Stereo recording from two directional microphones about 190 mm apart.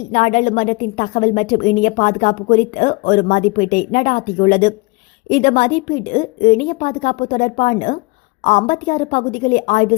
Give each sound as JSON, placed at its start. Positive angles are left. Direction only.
{"t": 0.1, "sound": "a woman's voice", "side_deg": 35}